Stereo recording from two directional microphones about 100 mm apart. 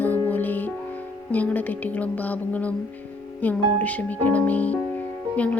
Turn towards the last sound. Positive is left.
turn(degrees=15)  # may be behind; listen again after turning